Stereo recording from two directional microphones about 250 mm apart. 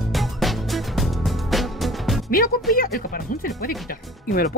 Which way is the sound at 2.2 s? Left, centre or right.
Left.